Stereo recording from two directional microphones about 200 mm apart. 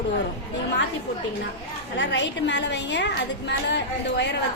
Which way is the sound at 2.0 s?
60° left (ahead or behind).